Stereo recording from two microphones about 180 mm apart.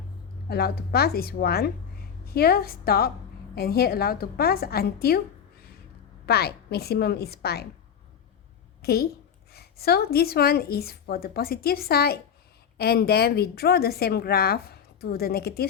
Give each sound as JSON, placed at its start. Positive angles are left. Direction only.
{"t": 0.4, "sound": "a woman's voice", "side_deg": 60}
{"t": 6.2, "sound": "a woman's voice", "side_deg": 60}
{"t": 8.8, "sound": "a woman's voice", "side_deg": 60}